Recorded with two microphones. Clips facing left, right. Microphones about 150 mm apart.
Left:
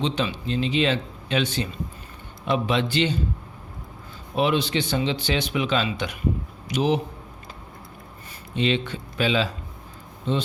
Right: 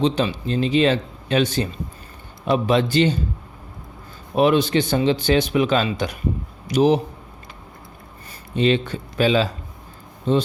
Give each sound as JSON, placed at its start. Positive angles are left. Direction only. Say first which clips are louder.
{"t": 0.0, "sound": "speech", "louder": "right 5 dB", "side_deg": -40}
{"t": 4.4, "sound": "speech", "louder": "right 6 dB", "side_deg": -45}
{"t": 8.5, "sound": "speech", "louder": "right 5 dB", "side_deg": -45}